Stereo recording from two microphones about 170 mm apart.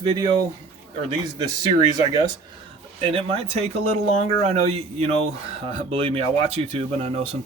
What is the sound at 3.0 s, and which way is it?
Speech, 30° right (ahead or behind).